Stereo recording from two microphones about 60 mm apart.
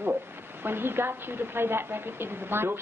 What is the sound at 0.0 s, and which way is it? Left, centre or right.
A woman's voice, right.